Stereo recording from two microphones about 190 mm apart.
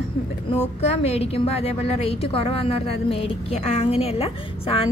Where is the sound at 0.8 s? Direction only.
35° left (ahead or behind).